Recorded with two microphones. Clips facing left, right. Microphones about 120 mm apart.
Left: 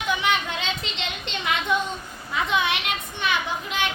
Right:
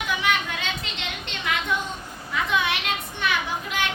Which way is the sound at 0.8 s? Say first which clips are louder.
Left 2 dB; 20° left (ahead or behind).